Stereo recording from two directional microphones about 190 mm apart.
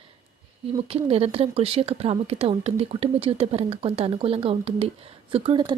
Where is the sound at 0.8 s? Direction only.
30° right (ahead or behind).